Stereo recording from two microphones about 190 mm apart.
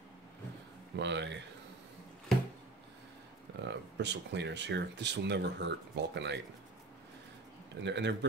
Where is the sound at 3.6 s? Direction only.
65° right (ahead or behind).